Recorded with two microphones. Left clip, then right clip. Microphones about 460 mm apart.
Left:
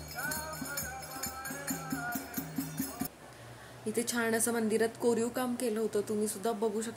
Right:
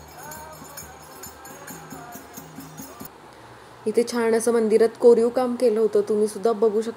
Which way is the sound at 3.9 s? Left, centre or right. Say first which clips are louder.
Right 11 dB; left.